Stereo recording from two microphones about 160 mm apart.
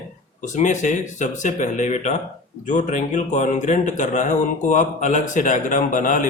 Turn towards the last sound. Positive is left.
turn(degrees=55)  # may be behind; listen again after turning